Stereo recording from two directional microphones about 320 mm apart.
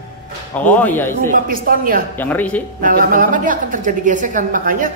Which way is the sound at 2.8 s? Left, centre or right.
Right.